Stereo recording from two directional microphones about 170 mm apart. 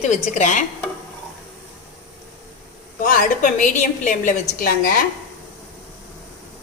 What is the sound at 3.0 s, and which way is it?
A woman's voice, 50° left (ahead or behind).